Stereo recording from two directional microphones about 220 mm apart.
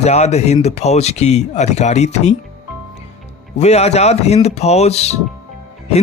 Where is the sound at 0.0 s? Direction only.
30° left (ahead or behind).